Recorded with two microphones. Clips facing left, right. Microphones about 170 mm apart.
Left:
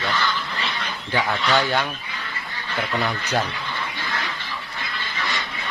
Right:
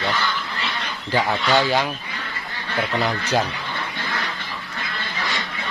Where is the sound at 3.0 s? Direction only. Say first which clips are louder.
Right 3 dB; 15° right (ahead or behind).